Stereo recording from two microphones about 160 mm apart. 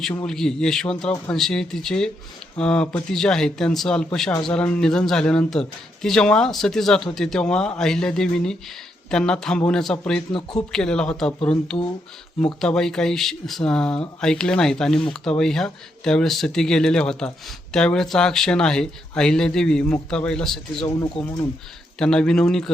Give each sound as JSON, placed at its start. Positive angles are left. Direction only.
{"t": 0.3, "sound": "speech", "side_deg": 5}
{"t": 12.5, "sound": "speech", "side_deg": 5}
{"t": 21.2, "sound": "speech", "side_deg": 40}
{"t": 21.9, "sound": "speech", "side_deg": 5}